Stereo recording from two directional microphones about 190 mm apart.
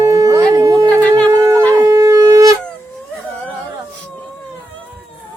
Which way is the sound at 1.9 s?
15° right (ahead or behind).